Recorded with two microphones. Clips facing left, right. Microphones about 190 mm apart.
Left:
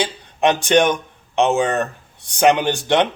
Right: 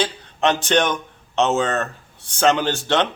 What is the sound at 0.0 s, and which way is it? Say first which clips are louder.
Speech: left 2 dB; 15° left (ahead or behind).